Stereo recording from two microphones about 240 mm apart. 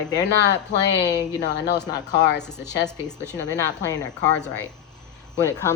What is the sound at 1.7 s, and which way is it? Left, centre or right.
Speech, centre.